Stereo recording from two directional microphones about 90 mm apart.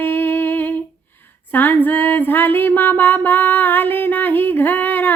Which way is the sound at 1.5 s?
20° left (ahead or behind).